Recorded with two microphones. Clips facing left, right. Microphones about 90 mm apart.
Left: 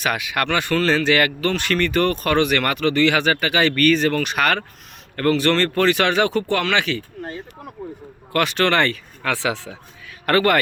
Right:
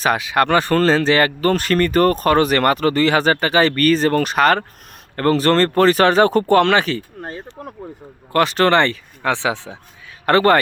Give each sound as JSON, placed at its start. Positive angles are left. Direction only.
{"t": 0.0, "sound": "speech", "side_deg": -30}
{"t": 8.3, "sound": "speech", "side_deg": -30}